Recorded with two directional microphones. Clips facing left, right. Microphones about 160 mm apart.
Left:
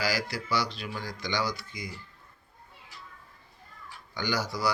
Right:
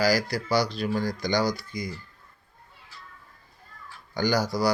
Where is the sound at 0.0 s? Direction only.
40° right (ahead or behind).